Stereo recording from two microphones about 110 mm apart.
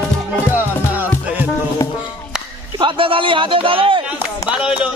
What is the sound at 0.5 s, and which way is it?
Music, 15° right (ahead or behind).